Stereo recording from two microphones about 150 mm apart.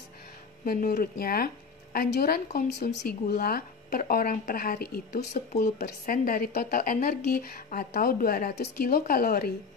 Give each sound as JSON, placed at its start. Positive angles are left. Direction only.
{"t": 0.7, "sound": "speech", "side_deg": 75}